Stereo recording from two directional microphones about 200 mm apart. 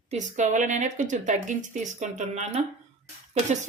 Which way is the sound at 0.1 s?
35° right (ahead or behind).